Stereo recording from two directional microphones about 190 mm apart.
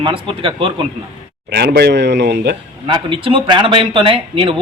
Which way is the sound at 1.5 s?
60° right (ahead or behind).